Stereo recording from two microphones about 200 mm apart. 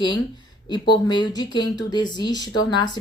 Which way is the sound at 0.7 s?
20° left (ahead or behind).